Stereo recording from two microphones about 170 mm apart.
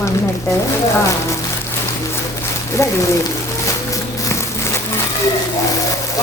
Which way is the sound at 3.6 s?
20° left (ahead or behind).